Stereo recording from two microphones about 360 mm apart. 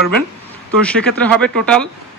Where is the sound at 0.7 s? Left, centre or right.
Centre.